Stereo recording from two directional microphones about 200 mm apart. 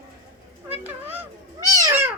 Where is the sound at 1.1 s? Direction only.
15° right (ahead or behind).